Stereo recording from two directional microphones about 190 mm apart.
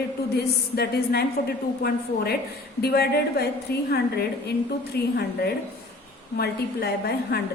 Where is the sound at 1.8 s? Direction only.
55° left (ahead or behind).